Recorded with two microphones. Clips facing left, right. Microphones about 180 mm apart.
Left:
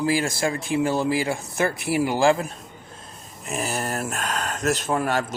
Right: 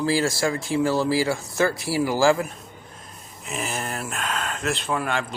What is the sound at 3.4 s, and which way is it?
Speech, 45° left (ahead or behind).